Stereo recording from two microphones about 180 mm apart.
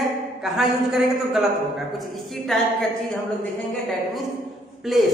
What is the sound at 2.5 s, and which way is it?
Speech, 5° left (ahead or behind).